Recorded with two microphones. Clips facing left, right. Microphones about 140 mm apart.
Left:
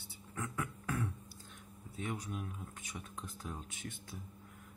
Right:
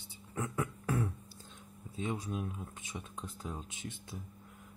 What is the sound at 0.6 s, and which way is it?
Beatboxing, 30° right (ahead or behind).